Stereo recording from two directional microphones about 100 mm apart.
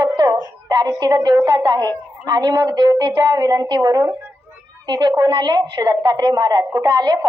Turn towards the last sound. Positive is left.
turn(degrees=-45)  # may be behind; listen again after turning